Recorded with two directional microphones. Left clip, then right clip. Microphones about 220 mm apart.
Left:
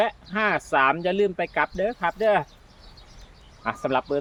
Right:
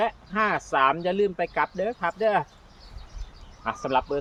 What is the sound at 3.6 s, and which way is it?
Speech, 40° left (ahead or behind).